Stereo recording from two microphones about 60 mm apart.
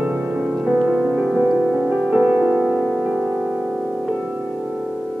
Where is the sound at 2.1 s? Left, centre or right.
Centre.